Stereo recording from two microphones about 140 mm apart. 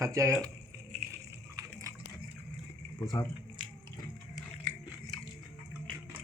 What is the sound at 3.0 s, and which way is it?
Speech, 25° left (ahead or behind).